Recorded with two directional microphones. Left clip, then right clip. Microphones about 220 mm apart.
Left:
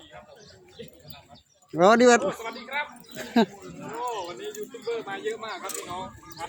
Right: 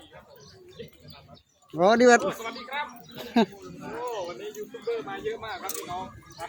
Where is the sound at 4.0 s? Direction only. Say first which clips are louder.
Left 1 dB; 50° left (ahead or behind).